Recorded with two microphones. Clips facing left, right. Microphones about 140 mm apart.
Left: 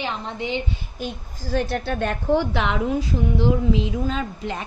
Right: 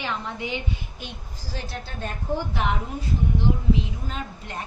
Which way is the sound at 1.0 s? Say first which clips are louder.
Left 8 dB; 50° left (ahead or behind).